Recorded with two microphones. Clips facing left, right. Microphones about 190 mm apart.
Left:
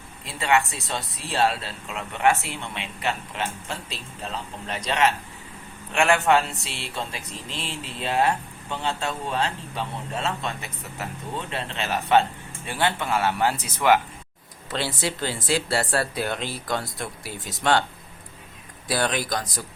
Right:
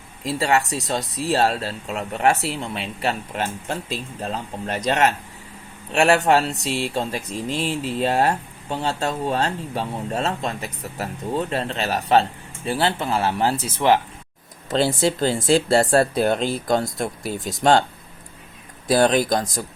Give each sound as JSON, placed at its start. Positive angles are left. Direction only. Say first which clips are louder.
{"t": 0.3, "sound": "speech", "louder": "right 3 dB", "side_deg": -40}
{"t": 14.7, "sound": "speech", "louder": "right 8 dB", "side_deg": -50}
{"t": 19.1, "sound": "speech", "louder": "right 8 dB", "side_deg": -45}